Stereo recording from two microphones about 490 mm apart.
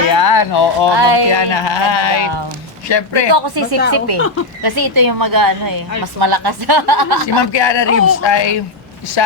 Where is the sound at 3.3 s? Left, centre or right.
Right.